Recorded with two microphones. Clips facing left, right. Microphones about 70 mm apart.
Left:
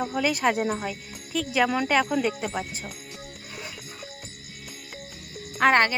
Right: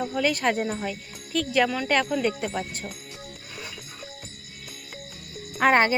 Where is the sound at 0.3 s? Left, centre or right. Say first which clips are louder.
Left 1 dB; centre.